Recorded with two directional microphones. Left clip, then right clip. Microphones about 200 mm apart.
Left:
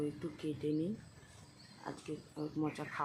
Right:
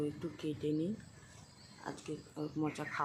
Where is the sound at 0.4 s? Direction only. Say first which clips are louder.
Right 1 dB; 5° right (ahead or behind).